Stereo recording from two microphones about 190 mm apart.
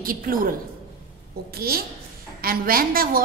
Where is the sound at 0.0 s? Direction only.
50° right (ahead or behind).